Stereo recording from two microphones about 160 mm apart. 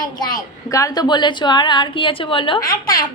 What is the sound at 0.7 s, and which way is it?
A woman's voice, 25° left (ahead or behind).